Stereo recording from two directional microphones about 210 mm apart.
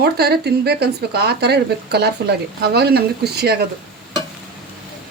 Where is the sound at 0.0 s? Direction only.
50° right (ahead or behind).